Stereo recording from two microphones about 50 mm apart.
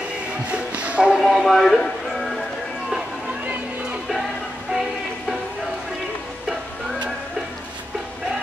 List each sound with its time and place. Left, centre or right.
0.5 s speech: right
1.3 s speech: centre